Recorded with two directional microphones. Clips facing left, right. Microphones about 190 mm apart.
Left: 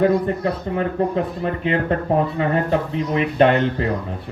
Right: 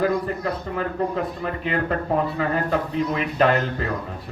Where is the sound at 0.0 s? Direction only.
30° left (ahead or behind).